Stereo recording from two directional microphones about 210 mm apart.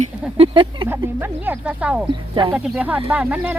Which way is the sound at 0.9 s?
10° right (ahead or behind).